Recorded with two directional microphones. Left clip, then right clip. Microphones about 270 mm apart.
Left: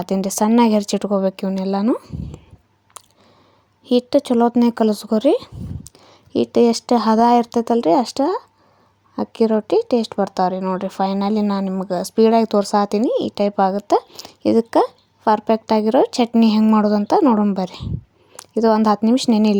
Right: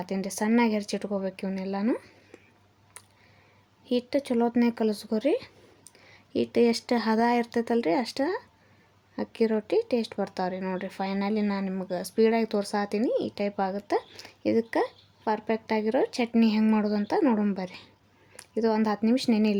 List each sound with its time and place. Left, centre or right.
0.0 s speech: left
3.0 s computer keyboard: left
3.8 s speech: left